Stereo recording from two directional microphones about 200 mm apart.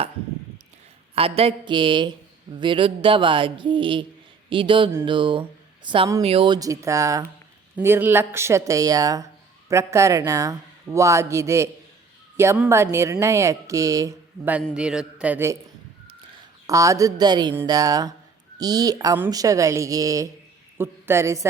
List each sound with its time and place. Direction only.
1.1 s speech: 30° right (ahead or behind); by 14.6 s 10° right (ahead or behind)
14.6 s a sound: 5° right (ahead or behind)
16.6 s speech: 15° right (ahead or behind)